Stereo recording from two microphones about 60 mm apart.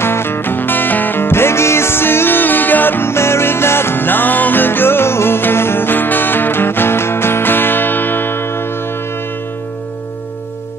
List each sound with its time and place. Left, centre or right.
0.0 s music: left